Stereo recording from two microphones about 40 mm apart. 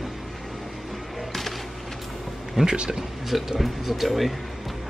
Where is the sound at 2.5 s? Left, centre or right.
Right.